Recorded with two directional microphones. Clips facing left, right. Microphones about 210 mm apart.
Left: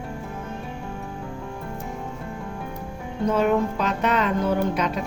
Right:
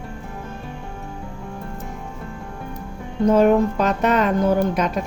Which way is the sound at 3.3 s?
45° right (ahead or behind).